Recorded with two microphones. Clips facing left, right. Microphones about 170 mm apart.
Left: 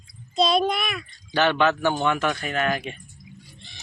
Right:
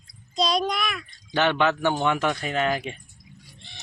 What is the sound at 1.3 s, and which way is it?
Speech, 20° right (ahead or behind).